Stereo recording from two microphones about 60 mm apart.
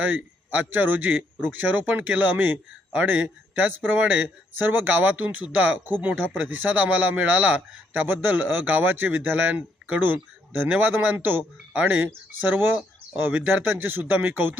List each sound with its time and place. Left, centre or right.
0.5 s speech: right
8.0 s speech: right